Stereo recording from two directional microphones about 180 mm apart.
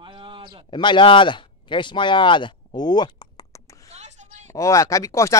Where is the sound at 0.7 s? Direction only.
25° left (ahead or behind).